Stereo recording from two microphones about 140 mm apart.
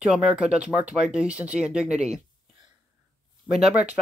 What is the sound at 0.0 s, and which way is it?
Speech, 5° right (ahead or behind).